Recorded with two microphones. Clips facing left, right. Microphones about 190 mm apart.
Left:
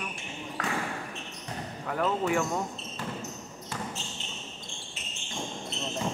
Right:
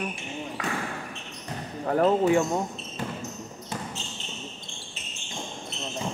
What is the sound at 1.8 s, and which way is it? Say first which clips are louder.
Speech: right 7 dB; 40° right (ahead or behind).